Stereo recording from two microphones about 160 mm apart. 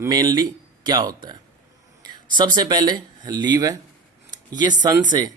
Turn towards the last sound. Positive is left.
turn(degrees=-25)  # may be behind; listen again after turning